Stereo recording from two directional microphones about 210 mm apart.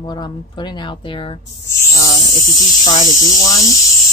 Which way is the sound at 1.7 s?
15° left (ahead or behind).